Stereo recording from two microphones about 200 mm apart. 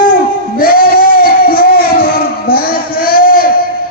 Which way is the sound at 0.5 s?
45° left (ahead or behind).